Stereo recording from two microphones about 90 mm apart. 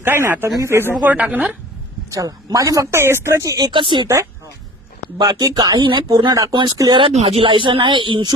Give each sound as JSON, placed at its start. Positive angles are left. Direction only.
{"t": 0.0, "sound": "speech", "side_deg": -25}
{"t": 1.0, "sound": "a woman's voice", "side_deg": -20}
{"t": 2.0, "sound": "speech", "side_deg": -40}
{"t": 3.6, "sound": "speech", "side_deg": -65}
{"t": 5.1, "sound": "speech", "side_deg": -50}